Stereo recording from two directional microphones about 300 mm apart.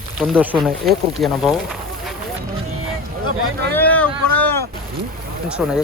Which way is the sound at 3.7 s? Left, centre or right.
Centre.